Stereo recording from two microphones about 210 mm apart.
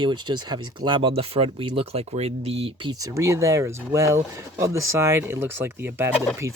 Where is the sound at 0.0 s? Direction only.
20° right (ahead or behind).